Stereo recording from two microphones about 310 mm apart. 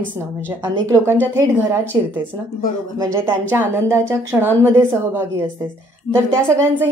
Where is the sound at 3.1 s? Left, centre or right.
Centre.